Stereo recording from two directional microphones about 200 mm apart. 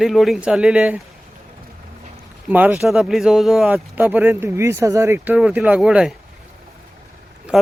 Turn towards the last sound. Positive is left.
turn(degrees=-5)  # may be behind; listen again after turning